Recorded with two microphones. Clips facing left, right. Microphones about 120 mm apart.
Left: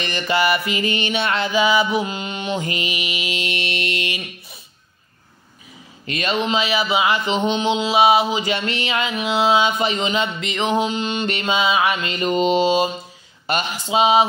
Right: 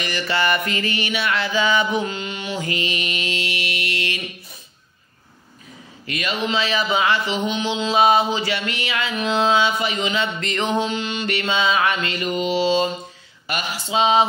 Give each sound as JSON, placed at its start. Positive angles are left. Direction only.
{"t": 0.0, "sound": "mantra", "side_deg": 20}
{"t": 2.1, "sound": "mantra", "side_deg": 20}
{"t": 6.0, "sound": "speech", "side_deg": 25}
{"t": 6.5, "sound": "mantra", "side_deg": 10}
{"t": 7.2, "sound": "mantra", "side_deg": 25}
{"t": 8.4, "sound": "mantra", "side_deg": 25}
{"t": 9.1, "sound": "mantra", "side_deg": 10}
{"t": 9.8, "sound": "mantra", "side_deg": 25}
{"t": 10.4, "sound": "mantra", "side_deg": 5}
{"t": 10.9, "sound": "mantra", "side_deg": 20}
{"t": 12.1, "sound": "mantra", "side_deg": 25}
{"t": 13.5, "sound": "speech", "side_deg": 25}
{"t": 13.8, "sound": "mantra", "side_deg": 10}